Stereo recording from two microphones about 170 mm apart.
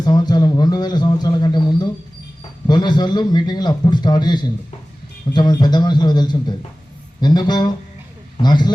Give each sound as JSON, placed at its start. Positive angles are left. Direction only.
{"t": 0.0, "sound": "a man's voice", "side_deg": 25}